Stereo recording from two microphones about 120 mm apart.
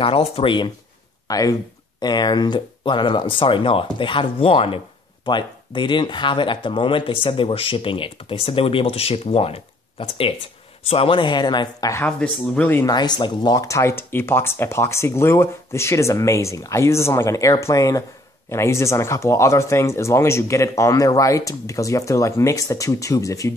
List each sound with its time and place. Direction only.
0.0 s speech: 50° left (ahead or behind)
1.2 s speech: 30° left (ahead or behind)
12.0 s speech: 10° left (ahead or behind)
12.8 s speech: 35° left (ahead or behind)